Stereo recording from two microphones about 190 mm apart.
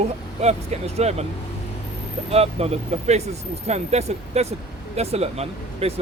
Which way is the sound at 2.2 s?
30° right (ahead or behind).